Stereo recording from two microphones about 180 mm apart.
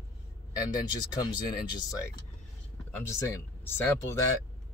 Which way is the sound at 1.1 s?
25° left (ahead or behind).